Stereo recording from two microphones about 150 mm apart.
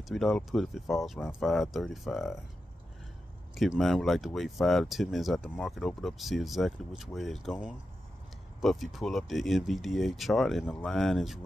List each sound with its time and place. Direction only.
0.0 s speech: centre (ahead or behind)
3.5 s speech: centre (ahead or behind)
8.5 s speech: centre (ahead or behind)